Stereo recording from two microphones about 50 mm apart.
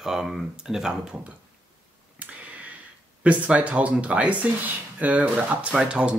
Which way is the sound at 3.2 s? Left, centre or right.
Right.